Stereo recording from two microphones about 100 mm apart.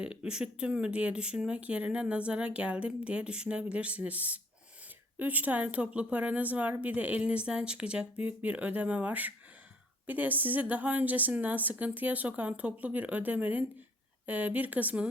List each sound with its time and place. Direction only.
0.0 s speech: 10° right (ahead or behind)